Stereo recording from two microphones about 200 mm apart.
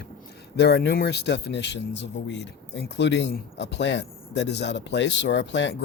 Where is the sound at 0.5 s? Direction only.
55° left (ahead or behind).